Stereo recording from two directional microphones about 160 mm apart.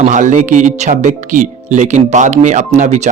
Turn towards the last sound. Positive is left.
turn(degrees=-45)  # may be behind; listen again after turning